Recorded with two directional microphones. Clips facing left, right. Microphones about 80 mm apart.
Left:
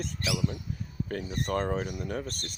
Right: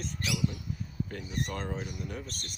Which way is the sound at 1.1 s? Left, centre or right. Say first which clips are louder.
Left 8 dB; left.